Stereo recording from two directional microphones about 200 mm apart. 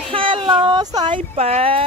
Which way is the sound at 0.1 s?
25° right (ahead or behind).